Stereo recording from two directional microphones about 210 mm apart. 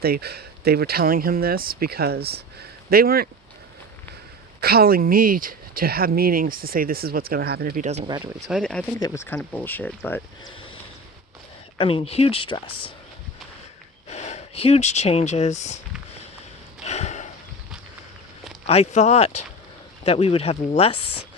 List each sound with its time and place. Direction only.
0.0 s speech: 50° right (ahead or behind)
4.6 s speech: 45° right (ahead or behind)
7.9 s speech: 25° right (ahead or behind)
8.4 s speech: centre (ahead or behind)
9.0 s speech: 15° left (ahead or behind)
11.8 s speech: 25° left (ahead or behind)
14.1 s speech: 30° left (ahead or behind)
16.8 s a sound: 30° left (ahead or behind)
18.6 s speech: 30° left (ahead or behind)